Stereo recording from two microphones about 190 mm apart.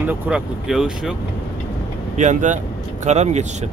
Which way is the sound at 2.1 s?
40° right (ahead or behind).